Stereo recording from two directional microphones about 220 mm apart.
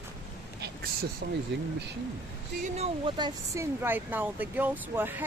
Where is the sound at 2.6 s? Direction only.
30° right (ahead or behind).